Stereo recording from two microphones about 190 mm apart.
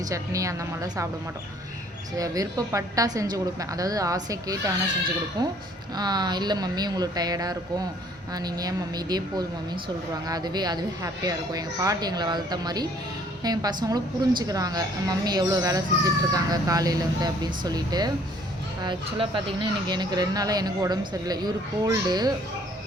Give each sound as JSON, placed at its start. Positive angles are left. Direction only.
{"t": 0.0, "sound": "a woman's voice", "side_deg": -15}
{"t": 2.1, "sound": "a woman's voice", "side_deg": -20}
{"t": 10.2, "sound": "a woman's voice", "side_deg": -20}